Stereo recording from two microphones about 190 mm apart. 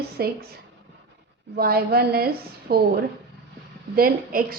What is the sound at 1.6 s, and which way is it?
A woman's voice, 55° right (ahead or behind).